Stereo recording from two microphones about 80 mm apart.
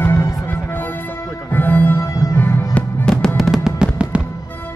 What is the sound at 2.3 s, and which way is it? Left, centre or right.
Music, left.